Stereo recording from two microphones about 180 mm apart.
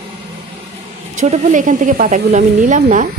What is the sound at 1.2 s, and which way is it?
Speech, 40° right (ahead or behind).